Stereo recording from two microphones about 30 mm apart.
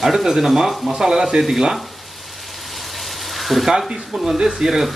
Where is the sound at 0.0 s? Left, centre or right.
Centre.